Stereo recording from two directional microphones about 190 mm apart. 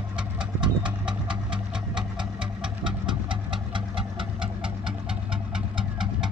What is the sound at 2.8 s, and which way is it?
Engine, 25° right (ahead or behind).